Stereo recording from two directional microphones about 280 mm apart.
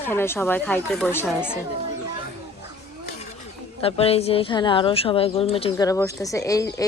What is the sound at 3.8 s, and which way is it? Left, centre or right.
Speech, left.